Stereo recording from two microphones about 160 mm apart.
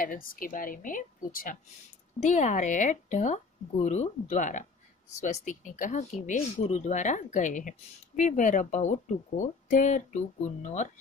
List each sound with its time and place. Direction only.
0.0 s a woman's voice: 60° left (ahead or behind)
2.1 s speech: 50° left (ahead or behind)